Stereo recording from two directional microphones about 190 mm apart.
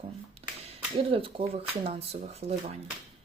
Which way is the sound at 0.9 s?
30° right (ahead or behind).